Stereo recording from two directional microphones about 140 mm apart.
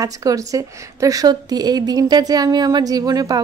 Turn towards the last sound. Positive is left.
turn(degrees=-25)  # may be behind; listen again after turning